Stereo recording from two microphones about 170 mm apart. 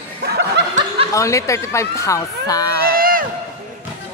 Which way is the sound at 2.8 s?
60° right (ahead or behind).